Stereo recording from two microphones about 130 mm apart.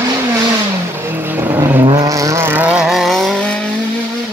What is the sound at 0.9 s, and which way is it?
Vehicle, 15° right (ahead or behind).